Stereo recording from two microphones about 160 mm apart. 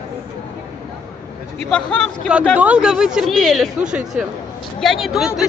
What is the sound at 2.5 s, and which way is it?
A woman's voice, 10° right (ahead or behind).